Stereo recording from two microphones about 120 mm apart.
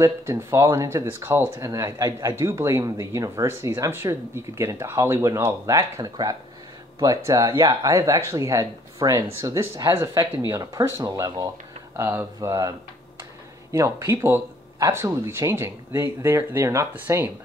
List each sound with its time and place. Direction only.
0.0 s speech: 25° right (ahead or behind)